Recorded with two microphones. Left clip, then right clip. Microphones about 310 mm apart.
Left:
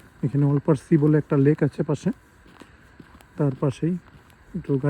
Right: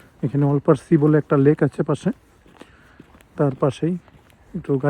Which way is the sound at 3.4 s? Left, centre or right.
Right.